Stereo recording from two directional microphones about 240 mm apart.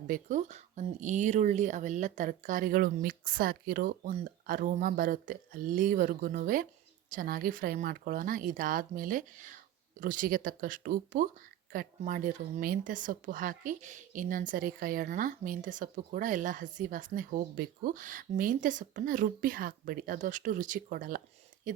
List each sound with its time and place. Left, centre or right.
0.1 s speech: right